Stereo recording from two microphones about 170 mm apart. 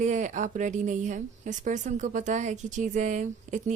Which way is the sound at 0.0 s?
45° right (ahead or behind).